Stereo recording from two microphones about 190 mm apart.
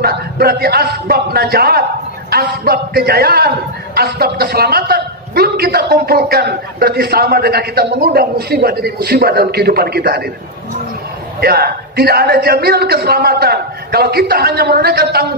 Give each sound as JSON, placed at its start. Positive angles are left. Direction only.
{"t": 0.0, "sound": "a man's voice", "side_deg": -55}
{"t": 11.4, "sound": "a man's voice", "side_deg": -55}